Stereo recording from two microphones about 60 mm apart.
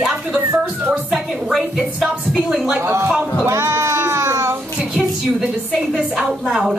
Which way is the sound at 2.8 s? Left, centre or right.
Right.